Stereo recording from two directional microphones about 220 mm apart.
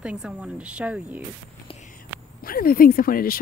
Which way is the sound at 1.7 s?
30° left (ahead or behind).